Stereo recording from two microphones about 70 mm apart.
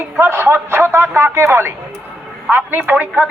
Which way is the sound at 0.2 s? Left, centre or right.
Right.